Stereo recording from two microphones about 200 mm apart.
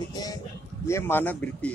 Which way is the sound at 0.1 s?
20° left (ahead or behind).